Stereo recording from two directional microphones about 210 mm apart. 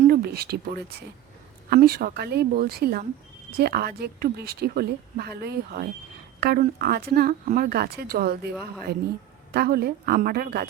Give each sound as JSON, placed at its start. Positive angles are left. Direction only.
{"t": 0.1, "sound": "a woman's voice", "side_deg": -45}